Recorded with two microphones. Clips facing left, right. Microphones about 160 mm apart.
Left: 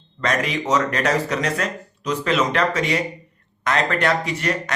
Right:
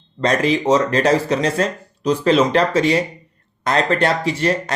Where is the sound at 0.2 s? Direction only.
30° right (ahead or behind).